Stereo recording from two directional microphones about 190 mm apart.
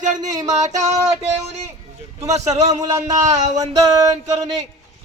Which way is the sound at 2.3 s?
35° right (ahead or behind).